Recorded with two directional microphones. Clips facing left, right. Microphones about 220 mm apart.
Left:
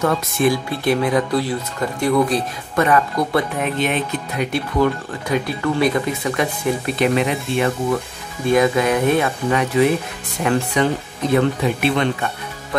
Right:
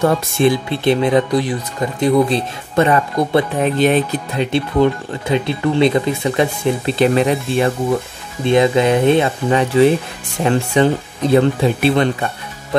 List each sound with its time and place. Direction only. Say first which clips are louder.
0.0 s speech: right 3 dB; 25° right (ahead or behind)